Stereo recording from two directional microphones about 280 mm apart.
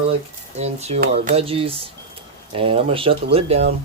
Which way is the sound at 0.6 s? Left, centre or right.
Right.